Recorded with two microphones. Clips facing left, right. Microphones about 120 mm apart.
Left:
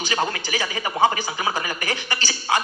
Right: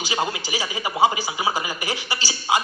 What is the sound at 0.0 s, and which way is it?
A man's voice, 10° right (ahead or behind).